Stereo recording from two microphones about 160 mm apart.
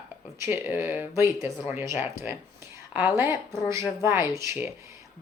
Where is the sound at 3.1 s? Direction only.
15° right (ahead or behind).